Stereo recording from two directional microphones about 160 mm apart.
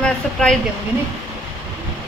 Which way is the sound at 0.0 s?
5° left (ahead or behind).